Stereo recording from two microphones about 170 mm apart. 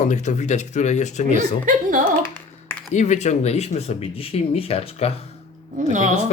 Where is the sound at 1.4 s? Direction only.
50° right (ahead or behind).